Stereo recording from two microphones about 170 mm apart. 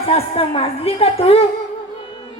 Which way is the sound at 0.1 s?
35° left (ahead or behind).